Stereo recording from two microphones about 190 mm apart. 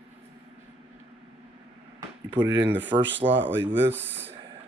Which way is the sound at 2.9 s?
25° right (ahead or behind).